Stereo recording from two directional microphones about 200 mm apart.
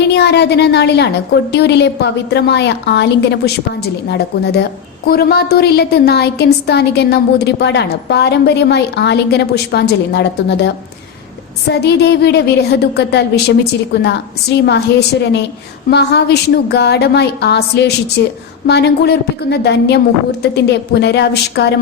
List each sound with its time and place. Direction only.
0.1 s a woman's voice: 55° left (ahead or behind)